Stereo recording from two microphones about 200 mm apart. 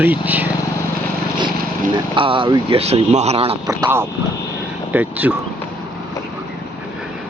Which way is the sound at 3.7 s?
15° right (ahead or behind).